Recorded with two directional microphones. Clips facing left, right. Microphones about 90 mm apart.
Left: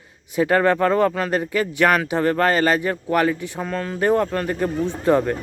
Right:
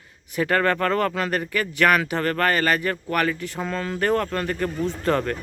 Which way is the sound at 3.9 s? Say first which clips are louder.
Left 4 dB; 15° left (ahead or behind).